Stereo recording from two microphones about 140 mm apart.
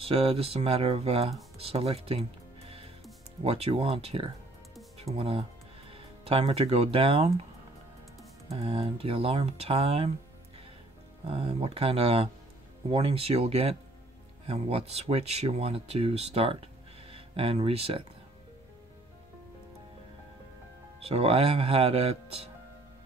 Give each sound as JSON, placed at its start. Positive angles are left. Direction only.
{"t": 0.0, "sound": "speech", "side_deg": -45}
{"t": 8.5, "sound": "speech", "side_deg": -40}
{"t": 11.2, "sound": "speech", "side_deg": -45}
{"t": 21.0, "sound": "speech", "side_deg": -45}